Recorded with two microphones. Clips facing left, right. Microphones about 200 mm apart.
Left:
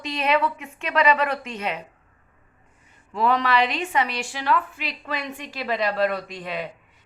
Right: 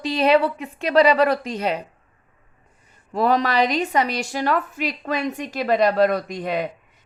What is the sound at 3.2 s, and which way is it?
A woman's voice, 40° right (ahead or behind).